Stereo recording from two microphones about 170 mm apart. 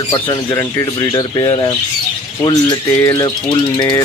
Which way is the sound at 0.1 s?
25° left (ahead or behind).